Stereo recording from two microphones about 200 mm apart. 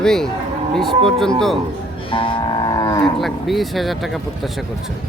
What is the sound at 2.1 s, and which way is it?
Cattle, 25° left (ahead or behind).